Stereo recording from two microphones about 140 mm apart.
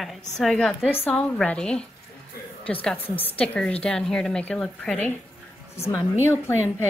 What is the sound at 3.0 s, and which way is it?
Speech, 45° left (ahead or behind).